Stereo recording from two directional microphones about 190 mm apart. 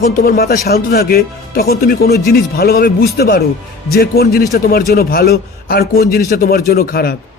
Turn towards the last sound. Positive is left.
turn(degrees=55)  # may be behind; listen again after turning